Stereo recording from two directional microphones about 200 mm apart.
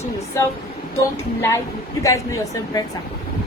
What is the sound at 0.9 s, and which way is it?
Speech, 15° left (ahead or behind).